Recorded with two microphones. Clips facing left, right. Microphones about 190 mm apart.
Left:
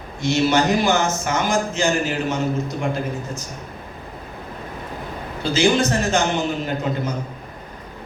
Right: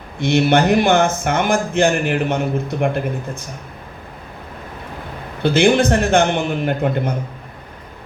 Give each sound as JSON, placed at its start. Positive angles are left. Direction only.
{"t": 0.2, "sound": "a man's voice", "side_deg": -60}
{"t": 5.4, "sound": "a man's voice", "side_deg": -60}